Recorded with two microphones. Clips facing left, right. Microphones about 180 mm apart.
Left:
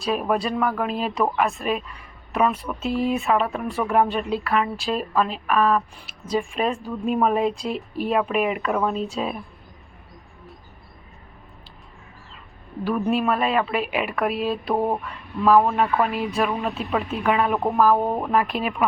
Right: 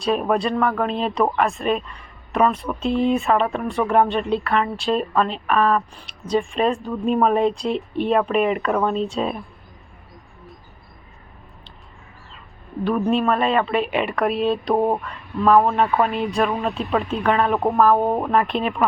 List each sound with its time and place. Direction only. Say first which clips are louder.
0.0 s speech: right 3 dB; centre (ahead or behind)
13.1 s speech: right 2 dB; 5° left (ahead or behind)
17.9 s speech: right 3 dB; 20° right (ahead or behind)
18.3 s speech: right 2 dB; 5° left (ahead or behind)